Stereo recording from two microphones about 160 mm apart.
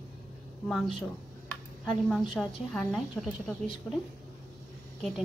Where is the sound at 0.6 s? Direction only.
Centre (ahead or behind).